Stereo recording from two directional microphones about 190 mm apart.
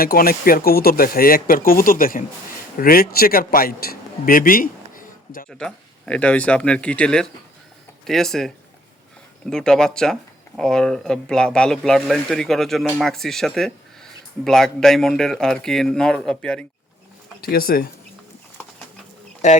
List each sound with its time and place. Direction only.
0.0 s a man's voice: 50° left (ahead or behind)
5.5 s speech: 5° left (ahead or behind)
17.4 s speech: 50° left (ahead or behind)